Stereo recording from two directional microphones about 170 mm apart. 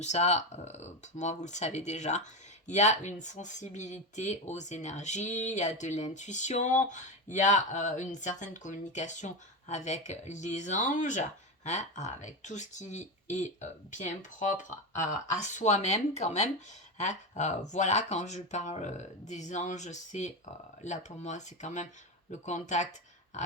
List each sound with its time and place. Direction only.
0.0 s speech: 40° left (ahead or behind)